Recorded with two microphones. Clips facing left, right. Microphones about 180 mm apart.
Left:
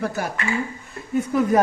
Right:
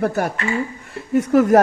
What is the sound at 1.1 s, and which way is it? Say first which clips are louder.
Speech: right 6 dB; 80° right.